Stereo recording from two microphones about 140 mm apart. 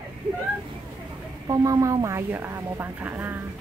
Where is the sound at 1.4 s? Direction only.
25° right (ahead or behind).